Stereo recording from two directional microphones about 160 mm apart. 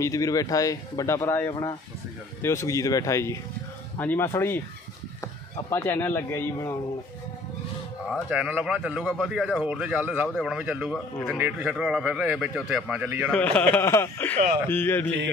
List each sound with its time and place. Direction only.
0.0 s speech: 20° left (ahead or behind)
1.5 s speech: 25° left (ahead or behind)
8.1 s a man's voice: 10° right (ahead or behind)
13.3 s speech: 10° left (ahead or behind)